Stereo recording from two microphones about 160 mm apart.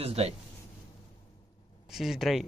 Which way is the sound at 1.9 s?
Centre (ahead or behind).